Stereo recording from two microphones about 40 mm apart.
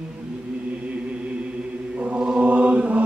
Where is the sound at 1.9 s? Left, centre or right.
Right.